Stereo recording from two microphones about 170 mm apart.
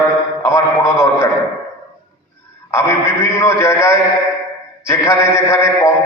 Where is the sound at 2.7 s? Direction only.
15° left (ahead or behind).